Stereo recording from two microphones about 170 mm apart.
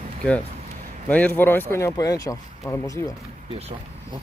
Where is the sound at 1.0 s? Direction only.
10° left (ahead or behind).